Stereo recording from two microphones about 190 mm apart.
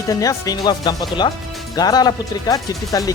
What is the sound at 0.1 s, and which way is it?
Speech, 20° left (ahead or behind).